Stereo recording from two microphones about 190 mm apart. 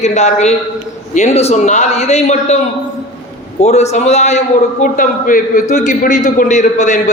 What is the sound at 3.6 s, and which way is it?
A man's voice, 35° left (ahead or behind).